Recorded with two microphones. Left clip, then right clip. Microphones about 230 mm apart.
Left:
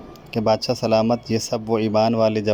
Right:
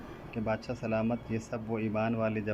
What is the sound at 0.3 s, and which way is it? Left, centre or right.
A man's voice, left.